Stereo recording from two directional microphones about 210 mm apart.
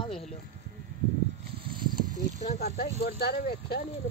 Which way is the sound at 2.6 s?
45° left (ahead or behind).